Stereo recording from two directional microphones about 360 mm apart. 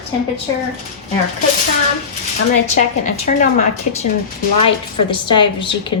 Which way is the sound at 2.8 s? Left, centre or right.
Left.